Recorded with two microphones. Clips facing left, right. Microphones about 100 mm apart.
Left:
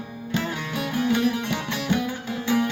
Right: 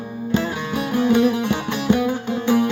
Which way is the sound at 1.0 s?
30° right (ahead or behind).